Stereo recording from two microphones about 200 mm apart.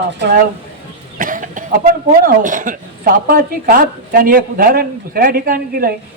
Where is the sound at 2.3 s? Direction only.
40° right (ahead or behind).